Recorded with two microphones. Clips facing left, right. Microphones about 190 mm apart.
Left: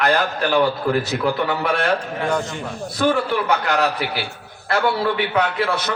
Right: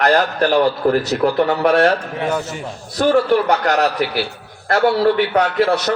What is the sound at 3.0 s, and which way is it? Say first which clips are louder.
A man's voice: right 5 dB; 45° right (ahead or behind).